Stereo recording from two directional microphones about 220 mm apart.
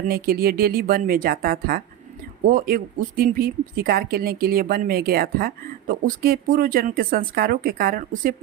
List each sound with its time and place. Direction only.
0.1 s speech: 45° right (ahead or behind)